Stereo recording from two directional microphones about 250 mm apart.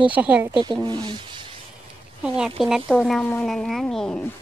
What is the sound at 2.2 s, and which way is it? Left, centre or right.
Speech, centre.